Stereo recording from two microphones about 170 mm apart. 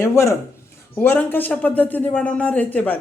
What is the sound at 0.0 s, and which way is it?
Speech, 15° left (ahead or behind).